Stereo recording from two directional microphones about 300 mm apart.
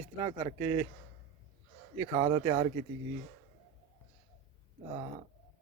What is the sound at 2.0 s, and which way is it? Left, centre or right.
Speech, centre.